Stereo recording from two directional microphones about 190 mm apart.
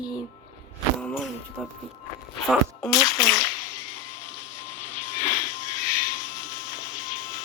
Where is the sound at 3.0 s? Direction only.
45° left (ahead or behind).